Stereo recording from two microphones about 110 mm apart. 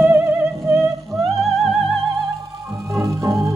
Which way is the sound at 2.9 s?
25° right (ahead or behind).